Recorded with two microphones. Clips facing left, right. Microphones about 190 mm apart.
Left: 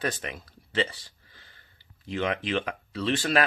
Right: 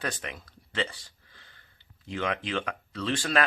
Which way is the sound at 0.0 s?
5° left (ahead or behind).